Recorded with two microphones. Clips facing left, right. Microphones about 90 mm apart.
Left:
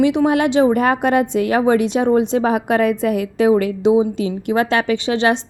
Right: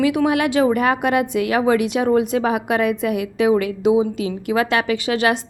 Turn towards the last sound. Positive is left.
turn(degrees=30)  # may be behind; listen again after turning